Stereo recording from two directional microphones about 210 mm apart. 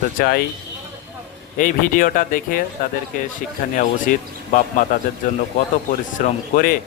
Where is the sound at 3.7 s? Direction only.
40° left (ahead or behind).